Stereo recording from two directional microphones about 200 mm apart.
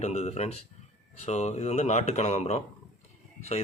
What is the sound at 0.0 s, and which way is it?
Speech, 35° left (ahead or behind).